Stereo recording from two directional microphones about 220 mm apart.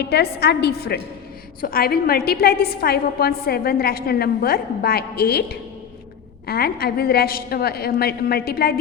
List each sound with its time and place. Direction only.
0.0 s a woman's voice: 45° left (ahead or behind)